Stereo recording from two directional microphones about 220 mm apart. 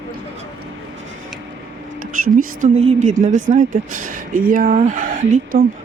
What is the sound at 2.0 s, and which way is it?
Speech, 35° right (ahead or behind).